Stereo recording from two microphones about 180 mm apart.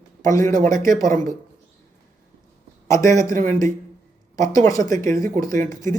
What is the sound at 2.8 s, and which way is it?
Speech, 15° left (ahead or behind).